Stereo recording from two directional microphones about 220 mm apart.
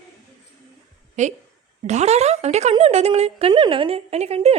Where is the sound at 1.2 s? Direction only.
35° right (ahead or behind).